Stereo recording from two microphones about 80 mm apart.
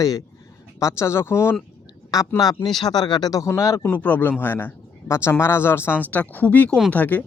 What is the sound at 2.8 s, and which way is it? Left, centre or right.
Speech, left.